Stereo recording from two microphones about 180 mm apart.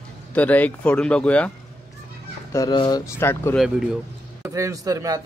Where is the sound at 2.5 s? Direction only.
20° left (ahead or behind).